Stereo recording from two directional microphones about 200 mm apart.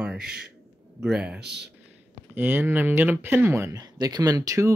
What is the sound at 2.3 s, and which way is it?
Speech, 10° right (ahead or behind).